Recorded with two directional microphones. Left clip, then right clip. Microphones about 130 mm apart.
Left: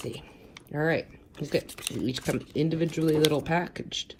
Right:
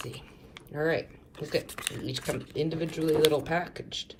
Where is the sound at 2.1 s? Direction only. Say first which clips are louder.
Left 2 dB; 35° left (ahead or behind).